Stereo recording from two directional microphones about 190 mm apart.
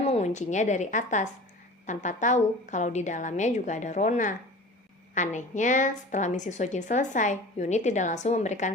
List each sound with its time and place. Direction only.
0.0 s a woman's voice: 35° left (ahead or behind)